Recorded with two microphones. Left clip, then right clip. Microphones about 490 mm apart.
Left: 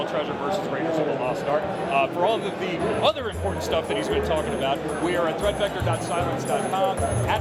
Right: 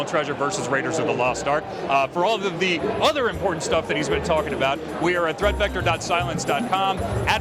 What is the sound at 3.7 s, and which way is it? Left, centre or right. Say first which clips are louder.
Speech: left 1 dB; right.